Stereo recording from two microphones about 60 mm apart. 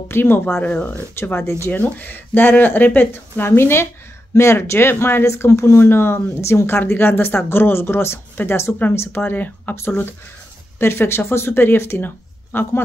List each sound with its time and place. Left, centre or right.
0.1 s speech: left
0.7 s speech: left
1.1 s speech: left
1.7 s speech: left
9.2 s speech: left
9.8 s speech: left